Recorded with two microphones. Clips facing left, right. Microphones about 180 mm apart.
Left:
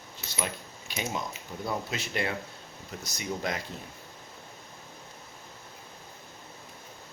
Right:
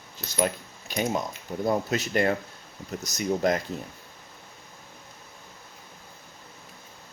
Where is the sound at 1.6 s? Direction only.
45° right (ahead or behind).